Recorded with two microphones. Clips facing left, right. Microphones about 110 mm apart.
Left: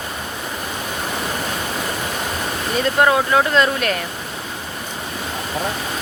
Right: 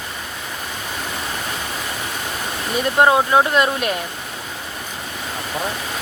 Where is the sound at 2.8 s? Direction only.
20° right (ahead or behind).